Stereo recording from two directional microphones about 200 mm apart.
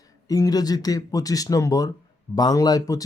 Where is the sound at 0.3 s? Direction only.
15° left (ahead or behind).